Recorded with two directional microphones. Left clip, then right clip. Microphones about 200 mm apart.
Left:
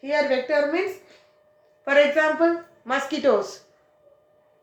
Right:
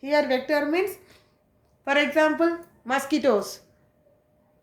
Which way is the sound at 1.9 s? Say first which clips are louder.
Left 3 dB; 55° right (ahead or behind).